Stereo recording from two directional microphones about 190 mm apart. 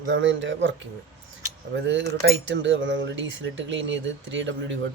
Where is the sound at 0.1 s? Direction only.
80° right.